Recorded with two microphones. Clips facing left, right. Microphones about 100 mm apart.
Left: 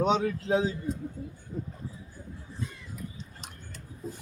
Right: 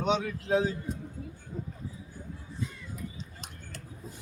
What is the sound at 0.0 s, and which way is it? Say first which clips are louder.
Speech: left 3 dB; 35° left (ahead or behind).